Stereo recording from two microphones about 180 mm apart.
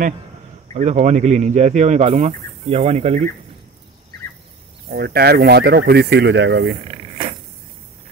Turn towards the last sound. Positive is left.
turn(degrees=-75)  # may be behind; listen again after turning